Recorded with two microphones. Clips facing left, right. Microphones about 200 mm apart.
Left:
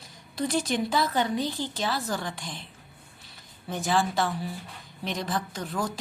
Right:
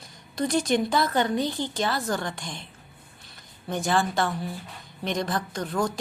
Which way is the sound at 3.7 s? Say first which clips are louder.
Right 1 dB; 5° left (ahead or behind).